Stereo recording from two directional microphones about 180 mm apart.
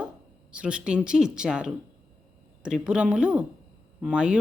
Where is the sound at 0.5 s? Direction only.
5° right (ahead or behind).